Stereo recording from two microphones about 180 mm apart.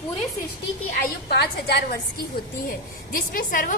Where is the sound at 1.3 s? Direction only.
65° left (ahead or behind).